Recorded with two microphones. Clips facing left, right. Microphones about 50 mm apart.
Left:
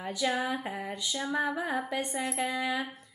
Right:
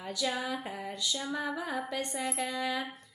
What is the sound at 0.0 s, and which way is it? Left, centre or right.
A woman's voice, centre.